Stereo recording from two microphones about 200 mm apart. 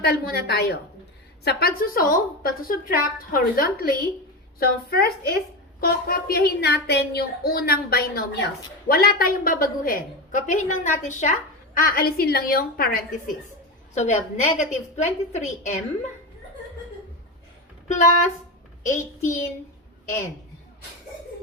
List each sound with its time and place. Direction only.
0.0 s a woman's voice: 55° left (ahead or behind)
13.9 s a woman's voice: 35° left (ahead or behind)
17.8 s a woman's voice: 40° left (ahead or behind)
18.9 s a child's voice: 15° left (ahead or behind)